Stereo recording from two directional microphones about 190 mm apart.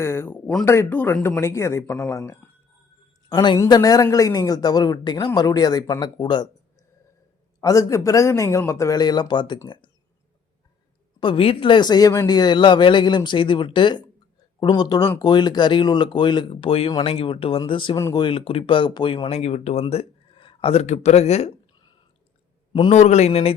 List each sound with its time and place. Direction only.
0.0 s speech: 15° left (ahead or behind)
7.6 s speech: 15° left (ahead or behind)
11.2 s speech: 25° left (ahead or behind)
22.7 s a man's voice: 30° left (ahead or behind)